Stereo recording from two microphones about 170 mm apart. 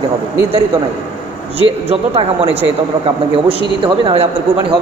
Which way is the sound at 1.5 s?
35° right (ahead or behind).